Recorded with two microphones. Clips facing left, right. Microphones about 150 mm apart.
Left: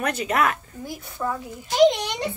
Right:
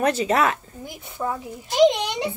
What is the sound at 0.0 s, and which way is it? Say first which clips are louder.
A woman's voice: right 3 dB; 30° right (ahead or behind).